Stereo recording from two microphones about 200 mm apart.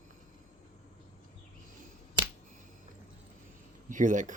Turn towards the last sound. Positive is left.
turn(degrees=-40)  # may be behind; listen again after turning